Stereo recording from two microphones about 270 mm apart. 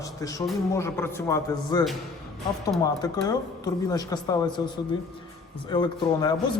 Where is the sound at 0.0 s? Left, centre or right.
Centre.